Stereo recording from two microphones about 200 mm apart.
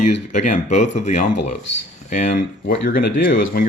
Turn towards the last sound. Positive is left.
turn(degrees=45)  # may be behind; listen again after turning